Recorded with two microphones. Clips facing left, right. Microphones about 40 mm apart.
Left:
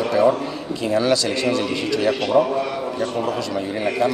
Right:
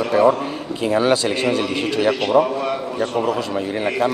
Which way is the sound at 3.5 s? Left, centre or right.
Right.